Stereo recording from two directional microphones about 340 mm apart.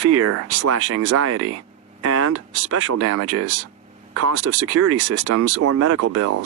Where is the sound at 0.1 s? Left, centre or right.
Right.